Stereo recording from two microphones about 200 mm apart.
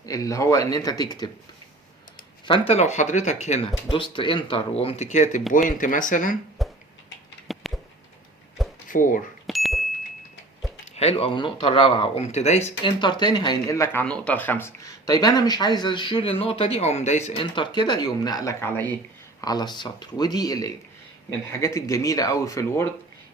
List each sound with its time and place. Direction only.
0.0 s speech: 15° left (ahead or behind)
2.5 s speech: 30° left (ahead or behind)
6.6 s beatboxing: centre (ahead or behind)
7.5 s a sound: centre (ahead or behind)
8.9 s speech: 40° left (ahead or behind)
9.5 s ding: centre (ahead or behind)
10.9 s speech: 30° left (ahead or behind)
12.8 s speech: 20° left (ahead or behind)